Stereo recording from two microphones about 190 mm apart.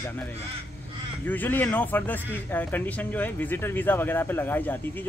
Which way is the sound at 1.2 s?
10° left (ahead or behind).